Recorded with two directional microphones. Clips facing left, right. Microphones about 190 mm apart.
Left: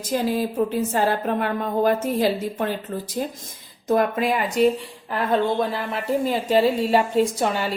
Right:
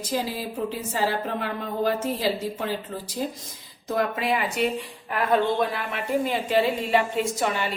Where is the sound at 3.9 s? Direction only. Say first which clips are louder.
Left 5 dB; 50° left (ahead or behind).